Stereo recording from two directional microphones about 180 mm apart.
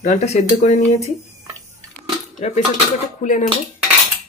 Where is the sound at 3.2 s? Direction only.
45° left (ahead or behind).